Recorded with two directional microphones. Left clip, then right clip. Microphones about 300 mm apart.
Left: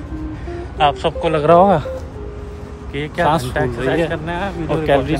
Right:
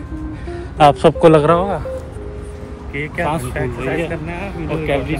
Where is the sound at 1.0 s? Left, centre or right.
Centre.